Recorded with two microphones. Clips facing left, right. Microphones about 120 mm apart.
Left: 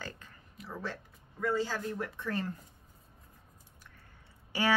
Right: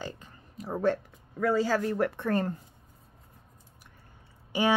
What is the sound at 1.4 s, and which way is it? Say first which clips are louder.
Speech: right 6 dB; 90° right.